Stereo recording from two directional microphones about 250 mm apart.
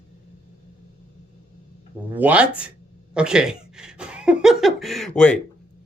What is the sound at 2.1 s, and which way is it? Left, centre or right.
Speech, centre.